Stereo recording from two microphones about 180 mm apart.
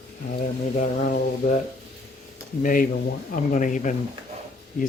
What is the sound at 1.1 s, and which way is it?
Speech, 50° left (ahead or behind).